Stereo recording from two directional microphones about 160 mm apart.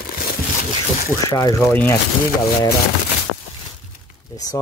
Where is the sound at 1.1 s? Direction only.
20° left (ahead or behind).